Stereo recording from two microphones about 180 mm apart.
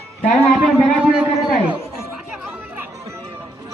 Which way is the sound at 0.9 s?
10° right (ahead or behind).